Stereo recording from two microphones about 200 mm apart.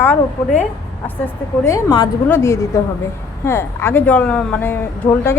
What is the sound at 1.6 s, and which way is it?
A woman's voice, 15° left (ahead or behind).